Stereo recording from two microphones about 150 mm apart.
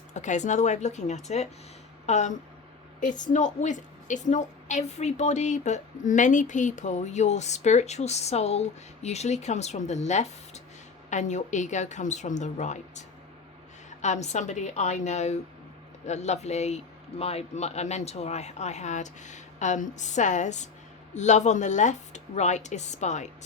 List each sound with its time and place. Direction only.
0.1 s a woman's voice: 55° left (ahead or behind)